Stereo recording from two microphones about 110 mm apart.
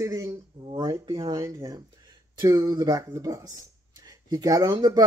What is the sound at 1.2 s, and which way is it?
Speech, 35° right (ahead or behind).